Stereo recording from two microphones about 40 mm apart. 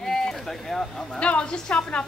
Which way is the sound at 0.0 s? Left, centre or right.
Centre.